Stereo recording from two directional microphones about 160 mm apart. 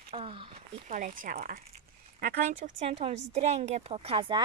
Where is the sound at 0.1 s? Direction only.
35° right (ahead or behind).